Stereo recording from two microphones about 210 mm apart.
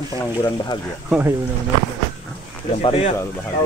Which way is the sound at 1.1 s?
10° right (ahead or behind).